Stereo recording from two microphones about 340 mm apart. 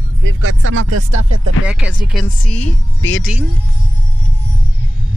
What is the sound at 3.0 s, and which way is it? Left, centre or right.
Speech, left.